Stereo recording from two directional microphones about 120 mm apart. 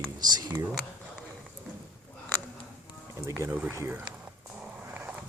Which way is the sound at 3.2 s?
20° right (ahead or behind).